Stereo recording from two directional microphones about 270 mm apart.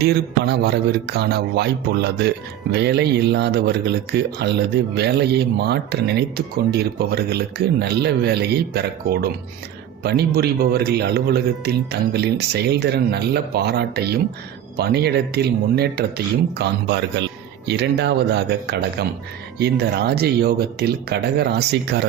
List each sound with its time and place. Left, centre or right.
0.0 s speech: right